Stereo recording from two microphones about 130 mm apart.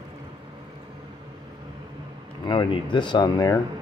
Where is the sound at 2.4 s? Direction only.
35° left (ahead or behind).